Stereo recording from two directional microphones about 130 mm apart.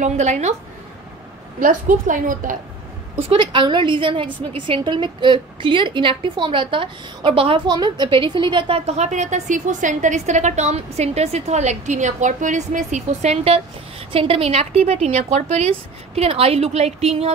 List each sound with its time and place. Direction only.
0.0 s a woman's voice: 60° right (ahead or behind)
1.6 s a woman's voice: 90° right
3.2 s a woman's voice: 45° right (ahead or behind)
7.6 s a woman's voice: 35° right (ahead or behind); by 17.3 s 55° right (ahead or behind)